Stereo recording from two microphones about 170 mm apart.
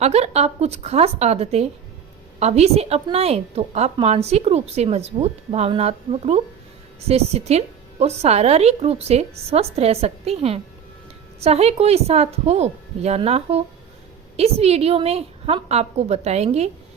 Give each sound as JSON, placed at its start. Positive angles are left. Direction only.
{"t": 0.0, "sound": "a woman's voice", "side_deg": -40}